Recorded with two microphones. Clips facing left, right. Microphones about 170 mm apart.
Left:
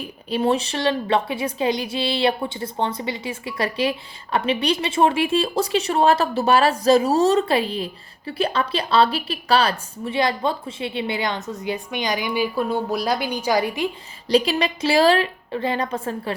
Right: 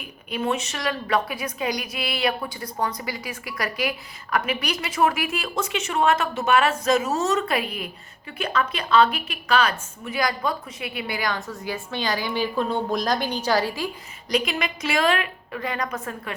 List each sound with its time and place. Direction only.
0.0 s a woman's voice: 30° left (ahead or behind)